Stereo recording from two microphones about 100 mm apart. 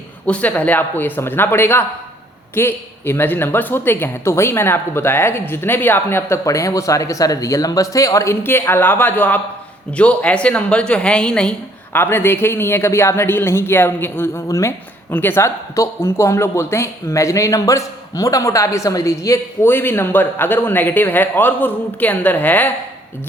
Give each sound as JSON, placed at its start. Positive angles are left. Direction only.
{"t": 0.3, "sound": "a woman's voice", "side_deg": 15}
{"t": 11.9, "sound": "speech", "side_deg": 20}
{"t": 19.6, "sound": "speech", "side_deg": 20}